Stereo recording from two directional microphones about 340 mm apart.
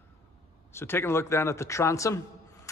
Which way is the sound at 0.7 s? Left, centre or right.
Centre.